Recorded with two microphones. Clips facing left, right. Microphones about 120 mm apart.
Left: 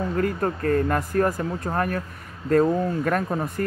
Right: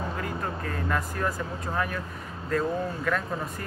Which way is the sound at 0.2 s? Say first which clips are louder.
Left 8 dB; 50° left (ahead or behind).